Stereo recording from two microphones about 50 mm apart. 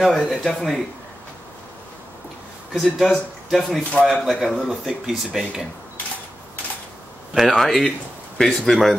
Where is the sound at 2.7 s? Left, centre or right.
Centre.